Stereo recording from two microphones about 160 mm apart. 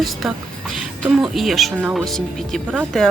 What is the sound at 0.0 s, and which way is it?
Speech, centre (ahead or behind).